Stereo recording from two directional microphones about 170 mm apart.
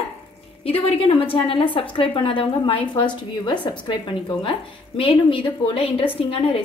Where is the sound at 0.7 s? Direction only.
35° left (ahead or behind).